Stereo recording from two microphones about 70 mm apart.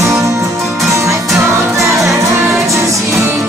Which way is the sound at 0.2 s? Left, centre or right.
Right.